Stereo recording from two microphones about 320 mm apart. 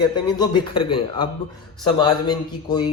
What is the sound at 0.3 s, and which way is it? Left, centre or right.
A man's voice, centre.